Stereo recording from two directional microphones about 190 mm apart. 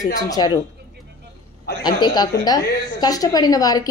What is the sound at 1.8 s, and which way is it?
Speech, 20° left (ahead or behind).